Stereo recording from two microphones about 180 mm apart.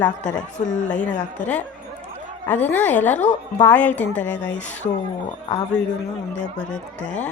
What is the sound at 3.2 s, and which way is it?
Speech, 40° left (ahead or behind).